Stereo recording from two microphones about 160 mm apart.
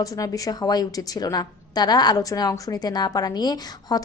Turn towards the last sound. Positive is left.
turn(degrees=25)  # may be behind; listen again after turning